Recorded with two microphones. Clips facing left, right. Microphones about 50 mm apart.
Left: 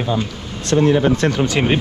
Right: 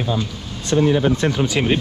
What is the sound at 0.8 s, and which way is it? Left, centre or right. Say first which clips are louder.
Speech: left 2 dB; left.